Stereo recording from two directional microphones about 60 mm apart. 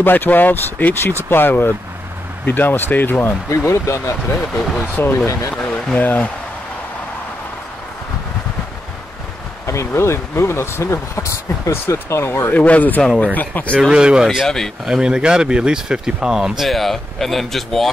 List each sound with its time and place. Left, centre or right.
0.0 s speech: left
3.4 s speech: left
4.9 s speech: left
5.5 s a sound: centre
5.9 s speech: left
9.7 s speech: left
12.5 s speech: left
13.7 s speech: centre
14.2 s speech: centre
14.9 s speech: centre